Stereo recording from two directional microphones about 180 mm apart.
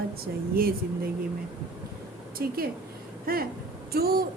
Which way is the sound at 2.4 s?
60° right (ahead or behind).